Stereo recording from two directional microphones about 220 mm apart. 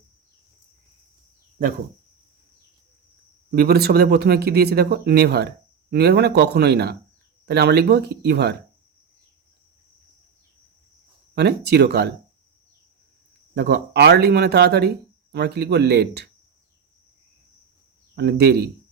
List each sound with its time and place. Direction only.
3.5 s speech: 45° right (ahead or behind)
11.3 s speech: 50° right (ahead or behind)
13.5 s speech: 50° right (ahead or behind)
18.2 s speech: 45° right (ahead or behind)